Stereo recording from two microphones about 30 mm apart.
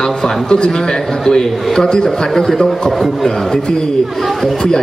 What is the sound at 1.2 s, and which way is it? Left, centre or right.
Speech, centre.